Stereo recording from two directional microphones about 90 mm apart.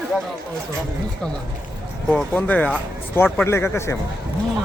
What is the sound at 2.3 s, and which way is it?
Speech, 15° left (ahead or behind).